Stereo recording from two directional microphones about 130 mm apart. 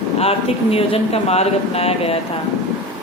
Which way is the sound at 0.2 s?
50° left (ahead or behind).